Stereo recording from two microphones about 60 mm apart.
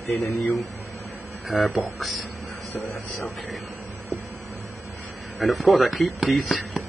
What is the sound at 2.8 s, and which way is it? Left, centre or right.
Speech, left.